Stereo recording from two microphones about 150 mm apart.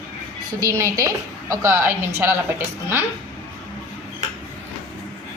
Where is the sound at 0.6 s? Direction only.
20° right (ahead or behind).